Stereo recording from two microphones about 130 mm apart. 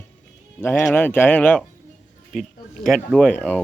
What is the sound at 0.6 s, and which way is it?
Speech, 15° left (ahead or behind).